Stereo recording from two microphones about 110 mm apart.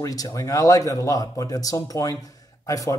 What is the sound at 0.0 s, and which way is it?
Speech, 30° left (ahead or behind).